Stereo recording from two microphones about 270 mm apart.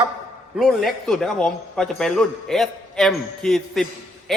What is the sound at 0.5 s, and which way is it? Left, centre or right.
A man's voice, centre.